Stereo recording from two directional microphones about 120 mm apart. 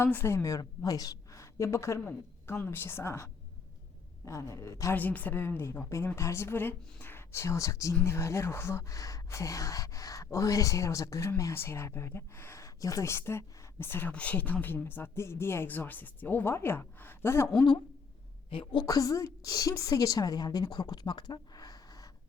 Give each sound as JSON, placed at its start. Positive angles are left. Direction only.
{"t": 0.0, "sound": "a woman's voice", "side_deg": 20}
{"t": 4.3, "sound": "speech", "side_deg": 25}
{"t": 18.9, "sound": "a woman's voice", "side_deg": 30}